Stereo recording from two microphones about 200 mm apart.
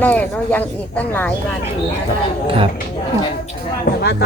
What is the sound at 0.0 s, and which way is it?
Speech, 10° left (ahead or behind).